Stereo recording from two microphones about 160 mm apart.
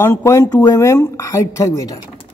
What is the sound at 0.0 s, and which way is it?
Speech, 15° left (ahead or behind).